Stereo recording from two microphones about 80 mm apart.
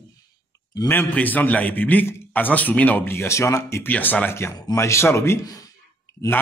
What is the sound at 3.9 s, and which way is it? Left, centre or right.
Speech, left.